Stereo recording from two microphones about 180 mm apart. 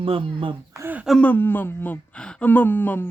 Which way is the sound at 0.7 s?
10° right (ahead or behind).